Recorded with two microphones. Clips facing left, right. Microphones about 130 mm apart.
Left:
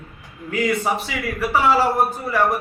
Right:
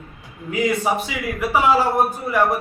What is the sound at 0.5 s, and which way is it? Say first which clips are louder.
A man's voice: right 1 dB; 15° right (ahead or behind).